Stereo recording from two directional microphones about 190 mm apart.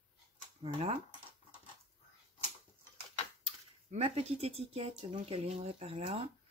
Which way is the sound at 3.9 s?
35° right (ahead or behind).